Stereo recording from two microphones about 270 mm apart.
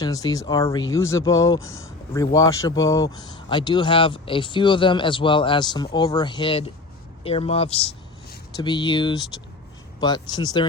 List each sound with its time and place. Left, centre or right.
0.0 s speech: centre